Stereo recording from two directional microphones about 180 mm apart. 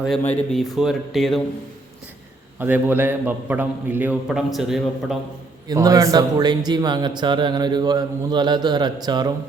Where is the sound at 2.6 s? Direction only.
10° right (ahead or behind).